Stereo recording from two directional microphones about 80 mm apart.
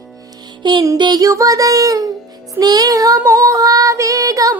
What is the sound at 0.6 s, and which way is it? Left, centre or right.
Music, right.